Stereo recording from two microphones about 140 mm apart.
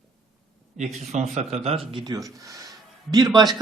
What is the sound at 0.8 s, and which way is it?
A man's voice, 55° right (ahead or behind).